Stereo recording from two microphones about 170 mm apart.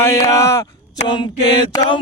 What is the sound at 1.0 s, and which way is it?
Mantra, 30° left (ahead or behind).